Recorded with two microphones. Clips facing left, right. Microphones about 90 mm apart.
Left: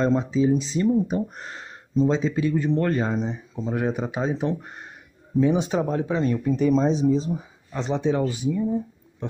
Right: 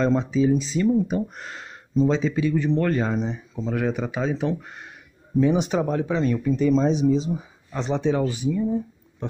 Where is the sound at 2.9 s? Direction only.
10° left (ahead or behind).